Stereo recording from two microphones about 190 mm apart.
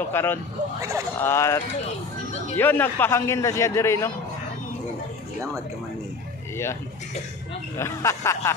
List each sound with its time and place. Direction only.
0.1 s a man's voice: 10° left (ahead or behind)
0.7 s speech: 15° right (ahead or behind)
1.2 s a man's voice: 15° left (ahead or behind)
6.5 s a man's voice: 15° left (ahead or behind)